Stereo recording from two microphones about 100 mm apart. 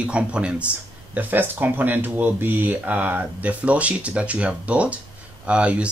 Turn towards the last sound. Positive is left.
turn(degrees=-10)  # may be behind; listen again after turning